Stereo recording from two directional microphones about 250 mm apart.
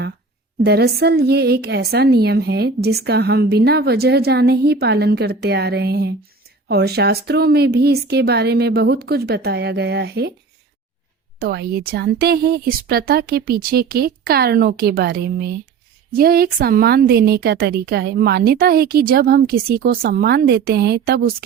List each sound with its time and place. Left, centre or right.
0.6 s a woman's voice: right
11.3 s a woman's voice: right